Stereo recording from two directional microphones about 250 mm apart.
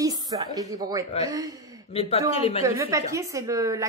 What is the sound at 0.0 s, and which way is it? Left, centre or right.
Speech, centre.